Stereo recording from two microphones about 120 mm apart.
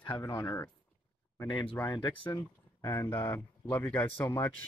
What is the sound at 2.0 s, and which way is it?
Speech, 35° left (ahead or behind).